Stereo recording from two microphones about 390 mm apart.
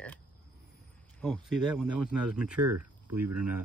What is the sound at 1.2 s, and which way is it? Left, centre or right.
Speech, centre.